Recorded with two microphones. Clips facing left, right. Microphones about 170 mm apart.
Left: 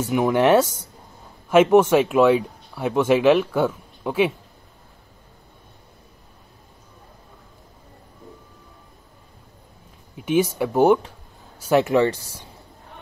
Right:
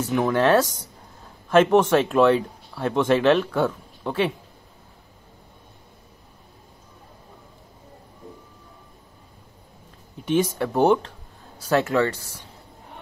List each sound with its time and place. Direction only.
0.0 s speech: 20° left (ahead or behind)
10.1 s speech: 10° left (ahead or behind)